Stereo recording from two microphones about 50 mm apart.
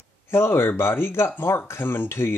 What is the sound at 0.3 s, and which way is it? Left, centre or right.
Speech, left.